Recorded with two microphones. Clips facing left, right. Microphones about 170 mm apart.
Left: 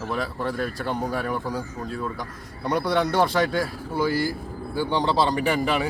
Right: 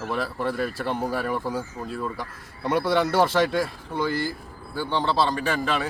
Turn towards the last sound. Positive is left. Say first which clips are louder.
# left 3 dB
turn(degrees=15)  # may be behind; listen again after turning